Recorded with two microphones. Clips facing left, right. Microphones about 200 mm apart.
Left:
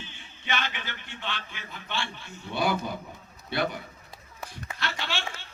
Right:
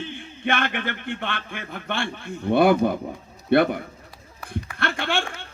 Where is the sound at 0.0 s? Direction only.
55° right (ahead or behind).